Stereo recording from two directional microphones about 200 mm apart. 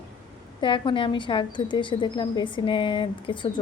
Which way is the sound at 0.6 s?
25° left (ahead or behind).